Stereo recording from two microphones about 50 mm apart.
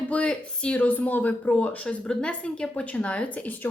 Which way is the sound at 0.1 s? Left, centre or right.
Left.